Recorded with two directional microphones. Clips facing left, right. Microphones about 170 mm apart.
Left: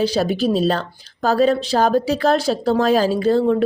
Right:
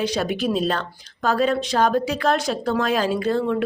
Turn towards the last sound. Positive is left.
turn(degrees=35)  # may be behind; listen again after turning